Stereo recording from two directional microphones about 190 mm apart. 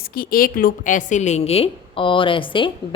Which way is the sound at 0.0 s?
50° left (ahead or behind).